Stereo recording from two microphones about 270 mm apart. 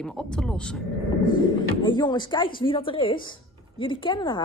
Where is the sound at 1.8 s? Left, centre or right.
Centre.